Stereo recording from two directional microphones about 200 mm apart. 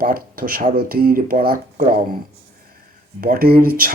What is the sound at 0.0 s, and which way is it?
Speech, 45° right (ahead or behind).